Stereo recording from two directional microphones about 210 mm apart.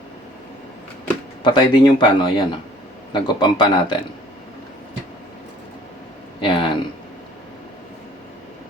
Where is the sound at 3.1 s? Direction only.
20° left (ahead or behind).